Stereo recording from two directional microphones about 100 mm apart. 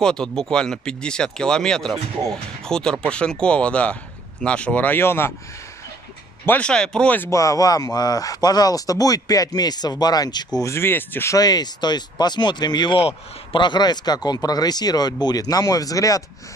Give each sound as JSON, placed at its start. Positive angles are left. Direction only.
{"t": 0.0, "sound": "a man's voice", "side_deg": 5}
{"t": 6.4, "sound": "a man's voice", "side_deg": 15}
{"t": 7.2, "sound": "speech", "side_deg": 35}
{"t": 10.7, "sound": "speech", "side_deg": 20}
{"t": 11.3, "sound": "speech", "side_deg": 40}